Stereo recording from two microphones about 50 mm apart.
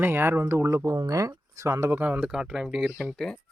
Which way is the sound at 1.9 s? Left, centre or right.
Right.